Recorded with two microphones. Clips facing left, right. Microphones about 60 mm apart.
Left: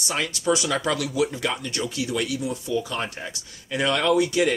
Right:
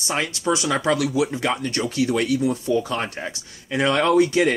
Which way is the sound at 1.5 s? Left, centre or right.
Right.